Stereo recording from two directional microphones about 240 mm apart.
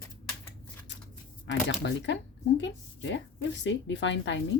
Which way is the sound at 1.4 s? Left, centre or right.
Left.